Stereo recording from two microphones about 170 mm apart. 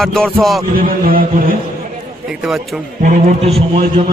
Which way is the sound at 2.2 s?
Centre (ahead or behind).